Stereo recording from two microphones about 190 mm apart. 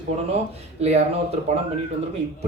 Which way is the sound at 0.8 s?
35° right (ahead or behind).